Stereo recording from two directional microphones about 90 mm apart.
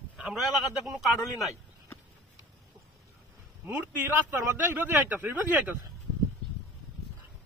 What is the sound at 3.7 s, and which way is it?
Speech, 20° right (ahead or behind).